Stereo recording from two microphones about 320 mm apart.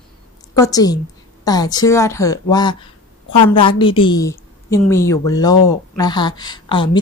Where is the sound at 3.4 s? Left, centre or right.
Centre.